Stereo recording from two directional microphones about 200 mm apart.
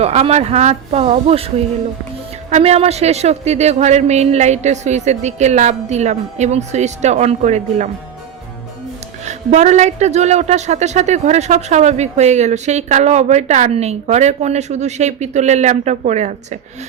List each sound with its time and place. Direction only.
0.0 s speech: 30° right (ahead or behind)
9.2 s speech: 35° right (ahead or behind)